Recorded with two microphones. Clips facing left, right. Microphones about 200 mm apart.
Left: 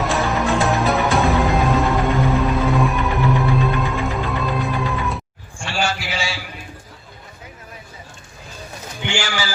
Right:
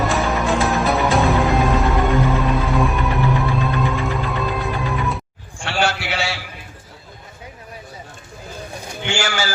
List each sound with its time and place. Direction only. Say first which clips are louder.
0.0 s music: even; centre (ahead or behind)
5.6 s a sound: right 2 dB; 65° right (ahead or behind)
9.0 s pigeon: right 1 dB; 45° right (ahead or behind)